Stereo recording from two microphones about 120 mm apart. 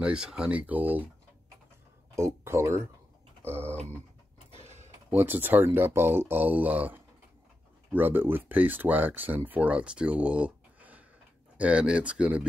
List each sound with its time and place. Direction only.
0.0 s speech: 5° right (ahead or behind)
2.1 s speech: 20° right (ahead or behind)
3.5 s a sound: 60° right (ahead or behind)
5.1 s speech: 15° right (ahead or behind)